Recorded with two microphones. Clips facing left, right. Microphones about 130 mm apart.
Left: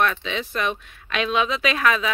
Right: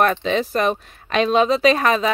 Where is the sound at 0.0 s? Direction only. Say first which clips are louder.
Right 5 dB; 40° right (ahead or behind).